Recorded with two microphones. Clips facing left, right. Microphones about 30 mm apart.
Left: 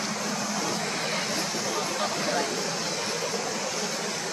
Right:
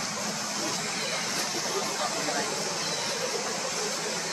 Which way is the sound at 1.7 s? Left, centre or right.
Centre.